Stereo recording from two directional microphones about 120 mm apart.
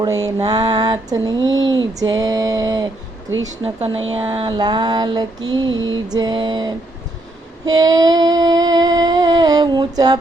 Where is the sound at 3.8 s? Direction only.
50° right (ahead or behind).